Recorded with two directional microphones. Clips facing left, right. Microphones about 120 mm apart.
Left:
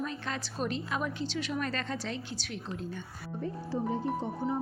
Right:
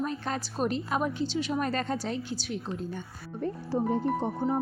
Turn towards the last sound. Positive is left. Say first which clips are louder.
# right 4 dB
turn(degrees=-55)  # may be behind; listen again after turning